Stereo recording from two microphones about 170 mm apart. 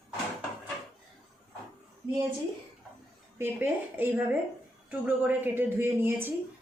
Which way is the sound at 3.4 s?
10° right (ahead or behind).